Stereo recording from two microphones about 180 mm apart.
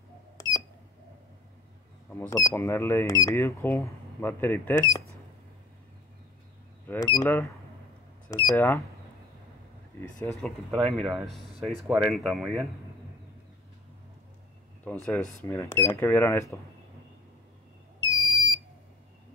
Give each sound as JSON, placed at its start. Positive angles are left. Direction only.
{"t": 2.1, "sound": "speech", "side_deg": 20}
{"t": 6.9, "sound": "speech", "side_deg": 20}
{"t": 8.5, "sound": "speech", "side_deg": 15}
{"t": 9.9, "sound": "speech", "side_deg": 10}
{"t": 14.9, "sound": "speech", "side_deg": 5}
{"t": 18.0, "sound": "smoke detector", "side_deg": 20}